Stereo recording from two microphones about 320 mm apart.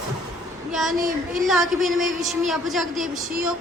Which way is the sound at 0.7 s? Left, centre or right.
Centre.